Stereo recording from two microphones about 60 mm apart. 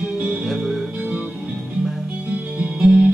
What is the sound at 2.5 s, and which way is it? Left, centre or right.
Music, centre.